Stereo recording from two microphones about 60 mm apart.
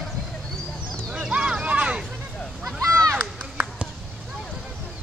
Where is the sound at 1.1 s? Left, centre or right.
Centre.